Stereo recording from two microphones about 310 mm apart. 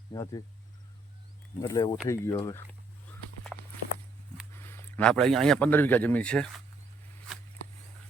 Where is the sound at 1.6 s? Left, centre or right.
Centre.